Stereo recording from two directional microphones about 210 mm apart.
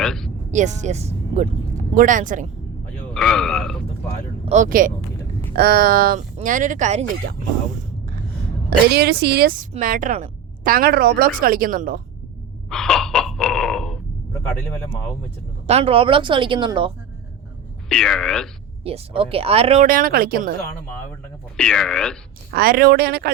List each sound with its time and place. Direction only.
0.0 s a sound: centre (ahead or behind)
0.5 s speech: 35° right (ahead or behind)
3.2 s speech: centre (ahead or behind)
4.4 s speech: 35° right (ahead or behind)
9.0 s a woman's voice: 50° right (ahead or behind)
12.7 s a sound: 5° left (ahead or behind)
15.6 s speech: 30° right (ahead or behind)
17.8 s speech: 5° left (ahead or behind)
18.8 s speech: 25° right (ahead or behind)
19.9 s a woman's voice: 45° right (ahead or behind)
21.5 s speech: 5° left (ahead or behind)
22.5 s a woman's voice: 45° right (ahead or behind)